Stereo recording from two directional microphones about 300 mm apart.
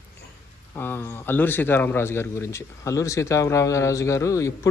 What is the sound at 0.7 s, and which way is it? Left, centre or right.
Speech, centre.